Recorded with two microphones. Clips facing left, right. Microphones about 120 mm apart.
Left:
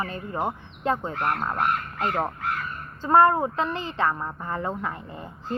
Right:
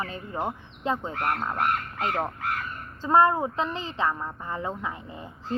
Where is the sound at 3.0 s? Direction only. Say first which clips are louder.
Left 2 dB; 55° left (ahead or behind).